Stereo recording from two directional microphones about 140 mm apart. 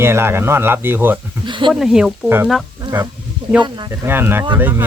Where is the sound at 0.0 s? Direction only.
15° right (ahead or behind).